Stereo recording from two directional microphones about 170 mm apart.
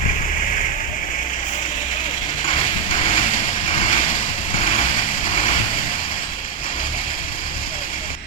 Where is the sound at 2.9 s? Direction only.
35° left (ahead or behind).